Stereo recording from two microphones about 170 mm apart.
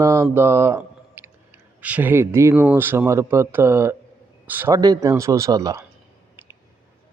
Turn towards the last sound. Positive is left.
turn(degrees=-20)  # may be behind; listen again after turning